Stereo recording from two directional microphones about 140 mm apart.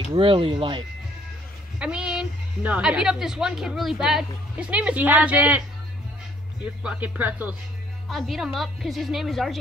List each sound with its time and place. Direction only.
0.1 s speech: 40° right (ahead or behind)
1.8 s a woman's voice: 5° right (ahead or behind)
6.6 s speech: 10° right (ahead or behind)
8.1 s a woman's voice: centre (ahead or behind)